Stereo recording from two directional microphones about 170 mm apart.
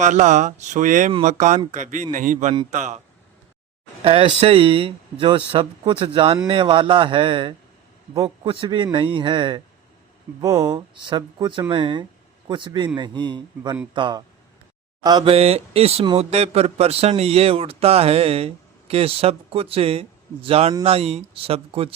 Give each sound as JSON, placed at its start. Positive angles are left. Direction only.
{"t": 0.0, "sound": "speech", "side_deg": -45}
{"t": 4.0, "sound": "speech", "side_deg": -35}
{"t": 15.3, "sound": "speech", "side_deg": -35}